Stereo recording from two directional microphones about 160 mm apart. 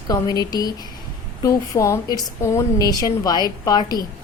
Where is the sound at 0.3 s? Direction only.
25° left (ahead or behind).